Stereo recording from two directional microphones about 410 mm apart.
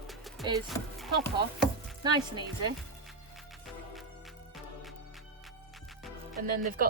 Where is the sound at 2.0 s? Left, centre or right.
Centre.